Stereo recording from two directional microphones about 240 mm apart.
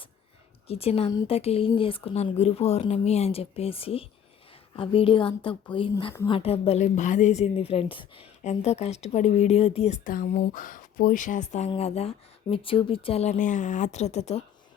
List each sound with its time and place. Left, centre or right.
0.7 s a woman's voice: left